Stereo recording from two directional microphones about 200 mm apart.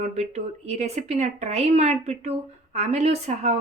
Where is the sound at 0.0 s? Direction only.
35° right (ahead or behind).